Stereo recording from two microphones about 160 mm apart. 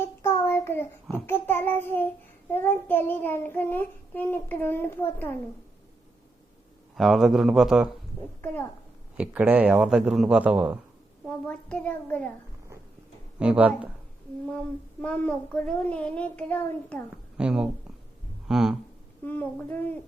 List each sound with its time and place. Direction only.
0.0 s a sound: 15° left (ahead or behind)
1.3 s child singing: 15° left (ahead or behind)
6.9 s a man's voice: centre (ahead or behind)
9.1 s speech: 10° right (ahead or behind)
11.3 s child singing: 10° left (ahead or behind)
13.4 s speech: 10° right (ahead or behind)
15.0 s child singing: 10° left (ahead or behind)
17.3 s a man's voice: 5° right (ahead or behind)
19.2 s child singing: 10° left (ahead or behind)